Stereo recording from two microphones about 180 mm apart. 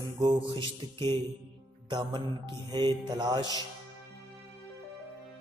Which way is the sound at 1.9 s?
25° right (ahead or behind).